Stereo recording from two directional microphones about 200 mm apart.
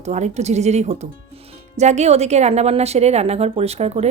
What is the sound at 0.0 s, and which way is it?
A woman's voice, 35° right (ahead or behind).